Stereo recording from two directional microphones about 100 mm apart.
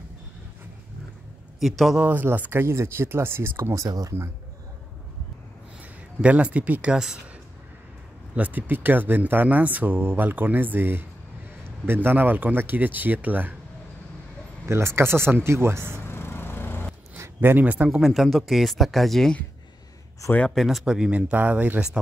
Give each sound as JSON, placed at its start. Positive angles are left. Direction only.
{"t": 1.6, "sound": "speech", "side_deg": 0}
{"t": 2.0, "sound": "speech", "side_deg": -20}
{"t": 6.2, "sound": "speech", "side_deg": -15}
{"t": 8.4, "sound": "speech", "side_deg": -15}
{"t": 14.7, "sound": "speech", "side_deg": -25}
{"t": 16.1, "sound": "lawn mower", "side_deg": 20}
{"t": 17.2, "sound": "speech", "side_deg": -20}
{"t": 17.8, "sound": "speech", "side_deg": -5}
{"t": 20.5, "sound": "speech", "side_deg": 0}